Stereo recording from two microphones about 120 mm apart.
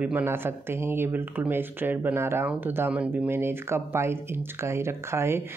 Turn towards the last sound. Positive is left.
turn(degrees=-20)  # may be behind; listen again after turning